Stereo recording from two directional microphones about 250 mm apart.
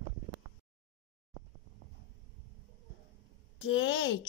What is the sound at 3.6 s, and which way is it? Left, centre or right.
Speech, left.